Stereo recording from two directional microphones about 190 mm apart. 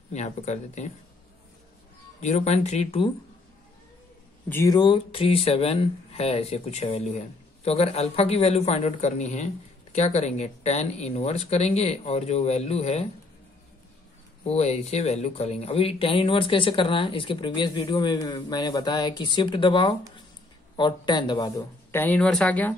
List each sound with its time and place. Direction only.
0.1 s speech: 40° left (ahead or behind)
2.2 s speech: 35° left (ahead or behind)
4.5 s speech: 15° left (ahead or behind); by 13.0 s 35° left (ahead or behind)
14.4 s a man's voice: 35° left (ahead or behind); by 22.8 s 10° left (ahead or behind)